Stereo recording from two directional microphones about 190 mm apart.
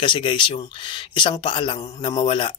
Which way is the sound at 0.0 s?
25° left (ahead or behind).